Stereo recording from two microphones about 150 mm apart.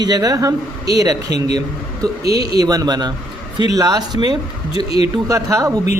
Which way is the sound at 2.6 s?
25° right (ahead or behind).